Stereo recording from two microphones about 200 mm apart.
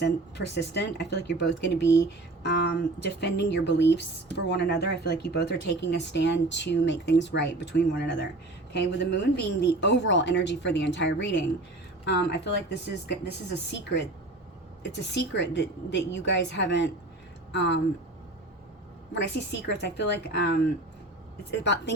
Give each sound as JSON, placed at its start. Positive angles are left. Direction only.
{"t": 0.0, "sound": "speech", "side_deg": 60}
{"t": 19.1, "sound": "speech", "side_deg": 60}
{"t": 21.6, "sound": "speech", "side_deg": 60}